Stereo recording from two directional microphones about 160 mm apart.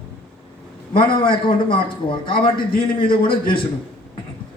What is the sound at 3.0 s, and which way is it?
Speech, 35° left (ahead or behind).